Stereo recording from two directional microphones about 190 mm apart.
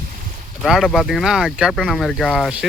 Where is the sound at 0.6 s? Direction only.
Centre (ahead or behind).